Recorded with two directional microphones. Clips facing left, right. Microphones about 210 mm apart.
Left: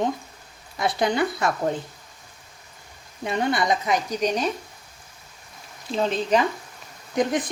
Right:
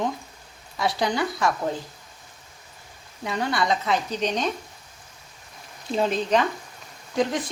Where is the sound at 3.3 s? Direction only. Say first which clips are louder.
Left 2 dB; 20° left (ahead or behind).